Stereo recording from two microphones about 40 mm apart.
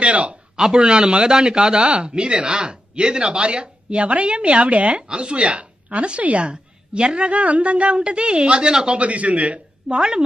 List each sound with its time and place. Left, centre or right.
0.0 s speech: right
9.9 s speech: centre